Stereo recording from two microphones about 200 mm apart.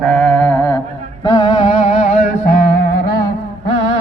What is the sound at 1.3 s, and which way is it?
Music, 20° left (ahead or behind).